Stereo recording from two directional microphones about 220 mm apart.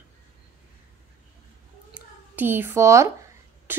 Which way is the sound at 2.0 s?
10° right (ahead or behind).